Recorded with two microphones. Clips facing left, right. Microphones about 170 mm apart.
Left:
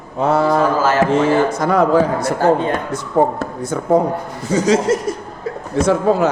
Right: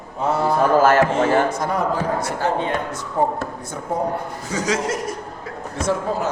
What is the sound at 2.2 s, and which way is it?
Speech, 40° left (ahead or behind).